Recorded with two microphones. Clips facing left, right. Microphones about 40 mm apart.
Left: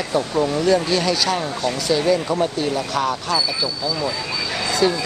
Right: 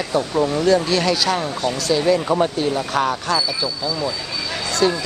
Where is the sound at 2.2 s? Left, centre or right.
Centre.